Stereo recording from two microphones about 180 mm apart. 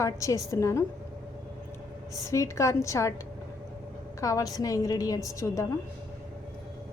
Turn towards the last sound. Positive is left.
turn(degrees=15)  # may be behind; listen again after turning